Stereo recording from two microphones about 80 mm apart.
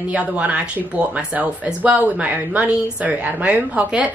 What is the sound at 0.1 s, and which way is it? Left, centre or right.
Speech, centre.